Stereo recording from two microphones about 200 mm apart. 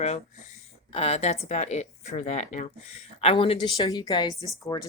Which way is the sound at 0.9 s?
30° left (ahead or behind).